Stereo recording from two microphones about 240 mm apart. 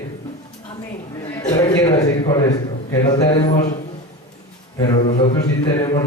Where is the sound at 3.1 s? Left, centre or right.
Centre.